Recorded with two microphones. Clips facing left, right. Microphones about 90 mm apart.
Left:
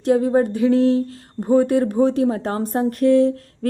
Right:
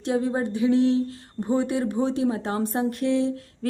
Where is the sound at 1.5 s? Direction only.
40° left (ahead or behind).